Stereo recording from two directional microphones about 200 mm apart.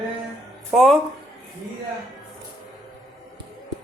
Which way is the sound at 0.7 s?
Centre (ahead or behind).